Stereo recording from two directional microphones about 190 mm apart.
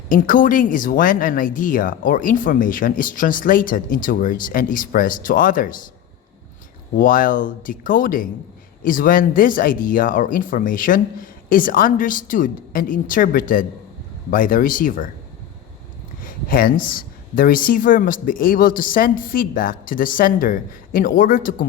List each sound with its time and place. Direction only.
0.1 s speech: 45° left (ahead or behind)
6.9 s speech: 45° left (ahead or behind)
16.2 s a sound: 50° left (ahead or behind)
16.9 s speech: 50° left (ahead or behind)